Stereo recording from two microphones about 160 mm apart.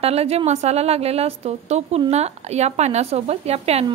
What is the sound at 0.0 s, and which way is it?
A woman's voice, 40° right (ahead or behind).